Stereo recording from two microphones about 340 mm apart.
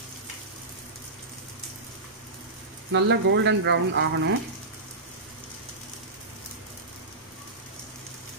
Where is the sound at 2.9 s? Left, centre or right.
Right.